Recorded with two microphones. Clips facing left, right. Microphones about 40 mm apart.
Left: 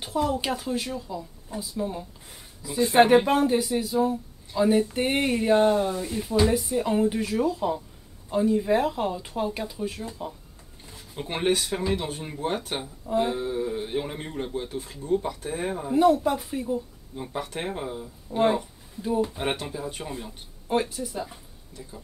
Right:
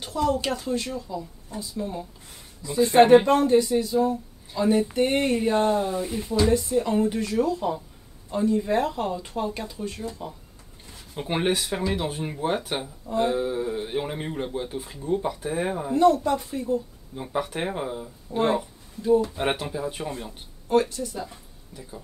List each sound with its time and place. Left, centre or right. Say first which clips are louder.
0.0 s a woman's voice: right 1 dB; centre
6.3 s speech: right 1 dB; centre
10.9 s speech: right 4 dB; centre
13.0 s speech: even; centre
13.3 s speech: right 2 dB; centre
15.9 s speech: even; centre
17.1 s speech: right 4 dB; centre
19.3 s speech: right 3 dB; centre
20.6 s speech: right 4 dB; centre
21.7 s speech: even; centre